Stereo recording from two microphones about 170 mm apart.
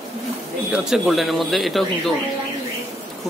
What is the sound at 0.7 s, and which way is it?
Speech, centre (ahead or behind).